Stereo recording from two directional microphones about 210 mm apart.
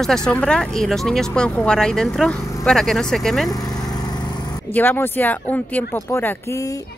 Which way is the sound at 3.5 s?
15° left (ahead or behind).